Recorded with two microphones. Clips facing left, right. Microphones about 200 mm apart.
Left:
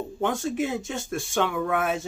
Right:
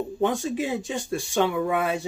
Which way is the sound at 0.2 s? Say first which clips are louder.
Right 1 dB; 15° right (ahead or behind).